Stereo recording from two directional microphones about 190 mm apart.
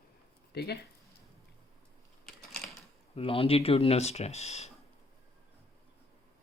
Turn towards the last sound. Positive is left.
turn(degrees=35)  # may be behind; listen again after turning